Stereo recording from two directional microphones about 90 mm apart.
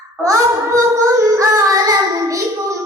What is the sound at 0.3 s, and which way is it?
Child singing, 35° right (ahead or behind).